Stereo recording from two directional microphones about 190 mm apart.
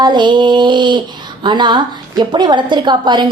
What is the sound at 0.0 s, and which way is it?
A woman's voice, 25° right (ahead or behind).